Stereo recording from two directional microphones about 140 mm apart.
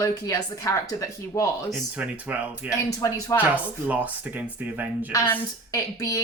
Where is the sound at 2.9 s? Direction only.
25° left (ahead or behind).